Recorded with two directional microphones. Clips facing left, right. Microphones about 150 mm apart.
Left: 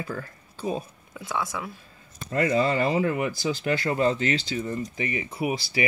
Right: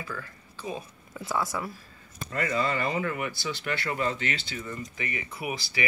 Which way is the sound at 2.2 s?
40° left (ahead or behind).